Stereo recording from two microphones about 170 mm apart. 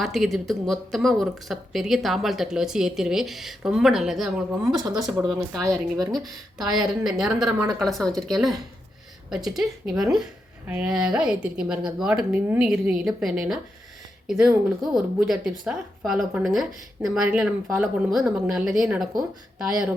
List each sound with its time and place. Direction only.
0.0 s speech: centre (ahead or behind)
5.6 s speech: 20° right (ahead or behind)
6.1 s speech: centre (ahead or behind)